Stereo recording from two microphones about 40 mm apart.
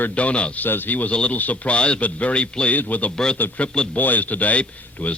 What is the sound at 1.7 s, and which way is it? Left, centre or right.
A man's voice, left.